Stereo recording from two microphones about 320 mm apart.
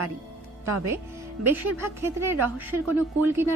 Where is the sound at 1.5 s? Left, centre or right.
Centre.